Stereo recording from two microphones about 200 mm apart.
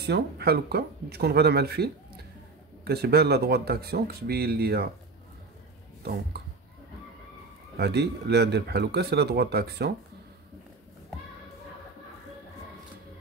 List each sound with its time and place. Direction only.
0.0 s speech: 55° right (ahead or behind)
7.8 s speech: 55° right (ahead or behind)